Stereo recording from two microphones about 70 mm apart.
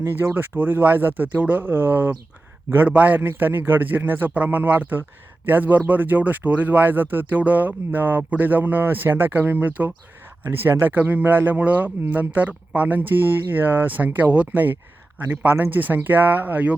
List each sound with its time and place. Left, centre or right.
0.0 s speech: right